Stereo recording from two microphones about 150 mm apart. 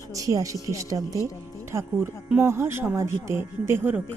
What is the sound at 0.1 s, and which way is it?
Speech, 20° right (ahead or behind).